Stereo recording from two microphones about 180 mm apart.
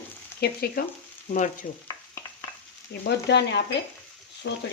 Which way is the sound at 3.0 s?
70° left (ahead or behind).